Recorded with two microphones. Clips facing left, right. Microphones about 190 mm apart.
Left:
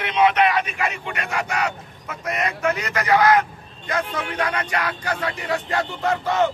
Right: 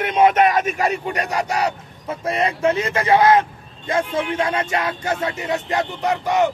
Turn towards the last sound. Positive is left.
turn(degrees=-15)  # may be behind; listen again after turning